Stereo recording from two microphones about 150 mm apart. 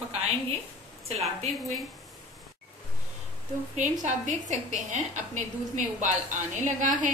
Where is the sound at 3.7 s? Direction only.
55° right (ahead or behind).